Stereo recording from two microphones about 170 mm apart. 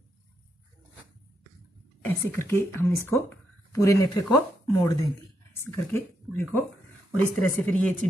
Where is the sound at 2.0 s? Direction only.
15° left (ahead or behind).